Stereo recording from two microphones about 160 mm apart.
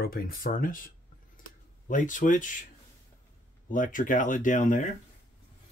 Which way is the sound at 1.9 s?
55° left (ahead or behind).